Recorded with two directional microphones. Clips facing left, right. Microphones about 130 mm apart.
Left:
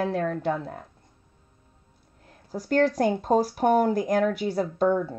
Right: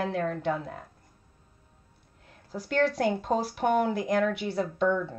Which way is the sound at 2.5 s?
40° left (ahead or behind).